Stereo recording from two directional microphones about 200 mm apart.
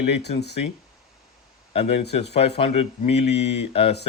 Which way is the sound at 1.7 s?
30° left (ahead or behind).